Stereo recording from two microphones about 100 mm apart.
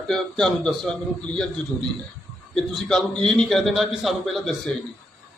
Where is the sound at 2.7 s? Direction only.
5° left (ahead or behind).